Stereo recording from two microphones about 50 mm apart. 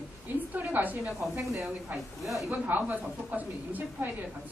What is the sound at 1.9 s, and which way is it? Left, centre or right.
Speech, centre.